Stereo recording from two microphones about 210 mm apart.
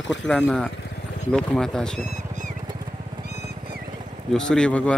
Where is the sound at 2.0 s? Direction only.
35° right (ahead or behind).